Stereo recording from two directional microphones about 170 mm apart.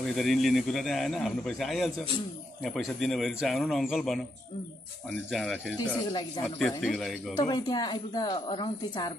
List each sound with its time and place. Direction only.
0.1 s speech: centre (ahead or behind)
5.3 s speech: 5° left (ahead or behind)
7.3 s speech: 25° left (ahead or behind)